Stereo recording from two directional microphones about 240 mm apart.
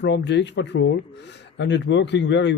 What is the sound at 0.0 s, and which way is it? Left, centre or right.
Speech, left.